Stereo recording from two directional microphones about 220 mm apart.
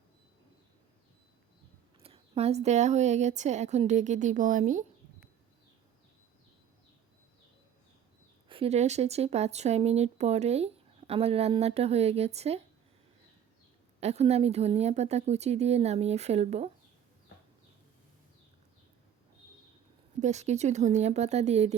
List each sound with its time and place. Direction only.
2.0 s speech: 25° right (ahead or behind)
8.4 s speech: 25° right (ahead or behind)
14.0 s speech: 30° right (ahead or behind)
20.2 s speech: 30° right (ahead or behind)